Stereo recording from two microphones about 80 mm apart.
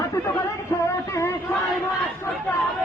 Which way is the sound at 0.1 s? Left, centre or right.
Left.